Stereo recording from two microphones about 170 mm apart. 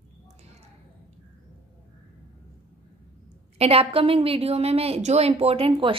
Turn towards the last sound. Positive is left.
turn(degrees=-30)  # may be behind; listen again after turning